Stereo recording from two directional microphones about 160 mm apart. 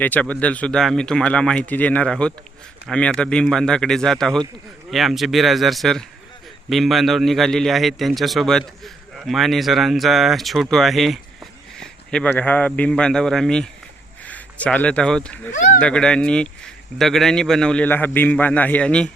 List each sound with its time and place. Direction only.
0.0 s a man's voice: 10° left (ahead or behind)
15.5 s speech: 50° left (ahead or behind)
15.8 s speech: 5° left (ahead or behind)